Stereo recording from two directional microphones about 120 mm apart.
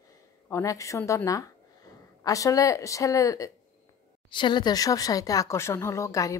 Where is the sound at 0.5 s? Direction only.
25° left (ahead or behind).